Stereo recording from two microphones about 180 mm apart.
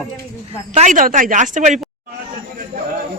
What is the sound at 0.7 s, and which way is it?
Speech, 40° right (ahead or behind).